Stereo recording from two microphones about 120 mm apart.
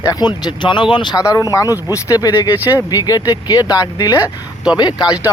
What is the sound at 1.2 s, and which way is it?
Speech, 25° left (ahead or behind).